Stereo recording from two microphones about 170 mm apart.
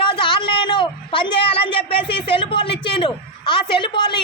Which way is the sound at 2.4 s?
30° left (ahead or behind).